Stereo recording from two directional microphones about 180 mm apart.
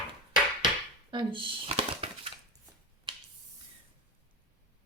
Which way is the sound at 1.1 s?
30° right (ahead or behind).